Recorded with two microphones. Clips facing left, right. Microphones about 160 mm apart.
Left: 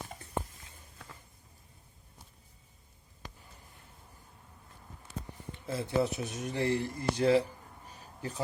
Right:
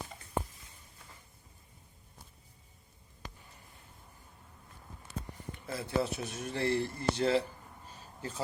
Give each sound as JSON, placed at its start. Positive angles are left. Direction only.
{"t": 5.6, "sound": "speech", "side_deg": 20}